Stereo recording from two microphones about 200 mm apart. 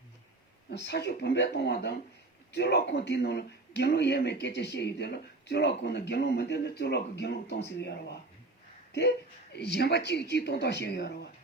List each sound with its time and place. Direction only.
0.7 s speech: 55° left (ahead or behind)